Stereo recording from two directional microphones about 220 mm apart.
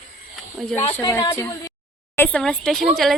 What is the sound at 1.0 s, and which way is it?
A woman's voice, 15° left (ahead or behind).